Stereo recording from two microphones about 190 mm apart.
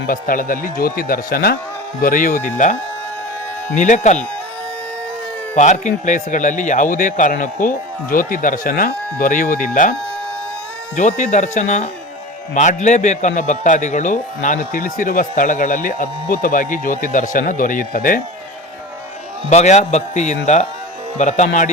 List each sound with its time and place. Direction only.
0.1 s a man's voice: 45° left (ahead or behind)
3.8 s a man's voice: 40° left (ahead or behind)
5.5 s a man's voice: 40° left (ahead or behind)
10.9 s a man's voice: 40° left (ahead or behind)
19.5 s a man's voice: 35° left (ahead or behind)